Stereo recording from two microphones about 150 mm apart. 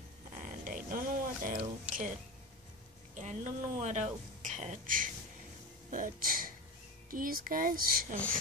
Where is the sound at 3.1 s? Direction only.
50° right (ahead or behind); by 8.2 s 75° right (ahead or behind).